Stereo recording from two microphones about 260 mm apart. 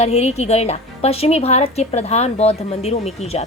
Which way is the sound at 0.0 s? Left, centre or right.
Left.